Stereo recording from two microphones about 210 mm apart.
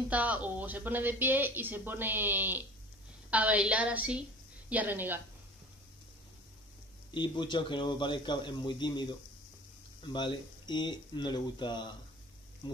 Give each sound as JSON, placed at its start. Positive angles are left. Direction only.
{"t": 0.1, "sound": "speech", "side_deg": -5}
{"t": 7.2, "sound": "speech", "side_deg": 20}